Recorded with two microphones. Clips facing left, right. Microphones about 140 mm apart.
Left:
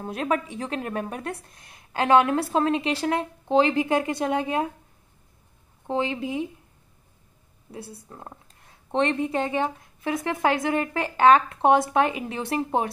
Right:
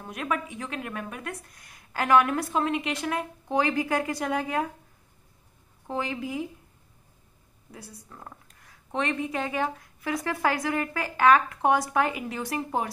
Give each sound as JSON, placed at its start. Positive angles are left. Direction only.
{"t": 0.0, "sound": "speech", "side_deg": 30}
{"t": 5.9, "sound": "speech", "side_deg": 25}
{"t": 7.7, "sound": "speech", "side_deg": 25}